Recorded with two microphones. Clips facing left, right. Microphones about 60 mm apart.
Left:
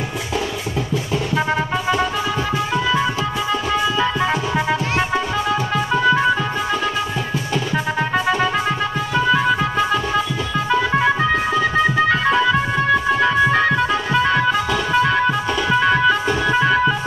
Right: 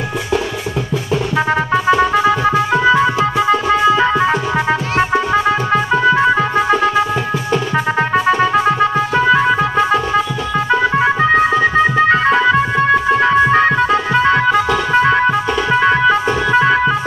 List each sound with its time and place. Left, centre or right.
1.9 s music: right